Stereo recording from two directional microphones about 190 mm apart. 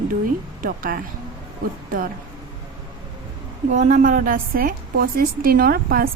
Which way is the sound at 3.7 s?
40° right (ahead or behind).